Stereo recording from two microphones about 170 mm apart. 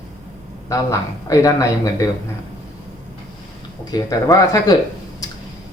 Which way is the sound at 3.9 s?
20° left (ahead or behind).